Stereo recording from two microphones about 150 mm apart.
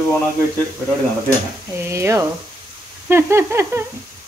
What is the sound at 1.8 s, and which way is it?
Speech, 20° right (ahead or behind).